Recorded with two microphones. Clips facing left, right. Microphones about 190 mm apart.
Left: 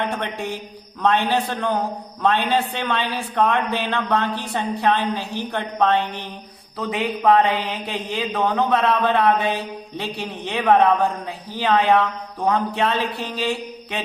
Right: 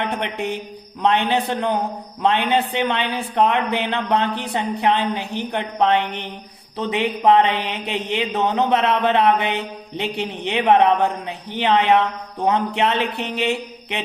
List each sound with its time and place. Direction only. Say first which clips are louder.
0.0 s speech: right 1 dB; 20° right (ahead or behind)